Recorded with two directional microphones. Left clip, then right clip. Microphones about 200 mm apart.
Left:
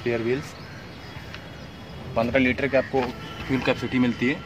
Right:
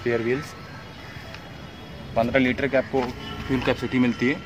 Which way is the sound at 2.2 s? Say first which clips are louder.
Right 1 dB; 5° right (ahead or behind).